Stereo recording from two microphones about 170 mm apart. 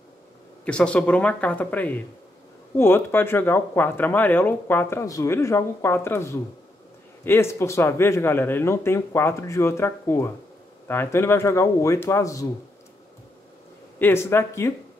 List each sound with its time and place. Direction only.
0.7 s speech: 5° left (ahead or behind)
13.9 s speech: 15° left (ahead or behind)